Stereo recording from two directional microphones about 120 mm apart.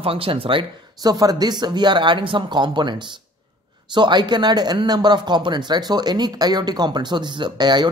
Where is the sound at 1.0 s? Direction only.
35° right (ahead or behind).